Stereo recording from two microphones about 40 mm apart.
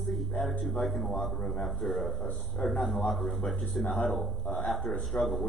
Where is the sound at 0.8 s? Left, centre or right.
Centre.